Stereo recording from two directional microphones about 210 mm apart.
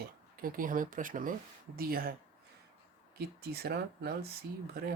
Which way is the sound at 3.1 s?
45° right (ahead or behind).